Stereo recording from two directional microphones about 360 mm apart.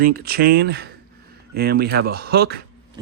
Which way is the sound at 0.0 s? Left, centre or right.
Right.